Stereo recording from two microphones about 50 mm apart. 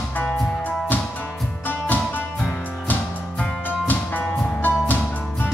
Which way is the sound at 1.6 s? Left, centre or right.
Left.